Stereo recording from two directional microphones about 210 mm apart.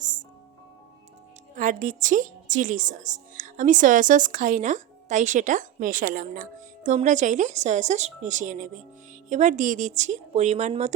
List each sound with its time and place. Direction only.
0.0 s music: 40° right (ahead or behind)
1.5 s a woman's voice: 40° right (ahead or behind)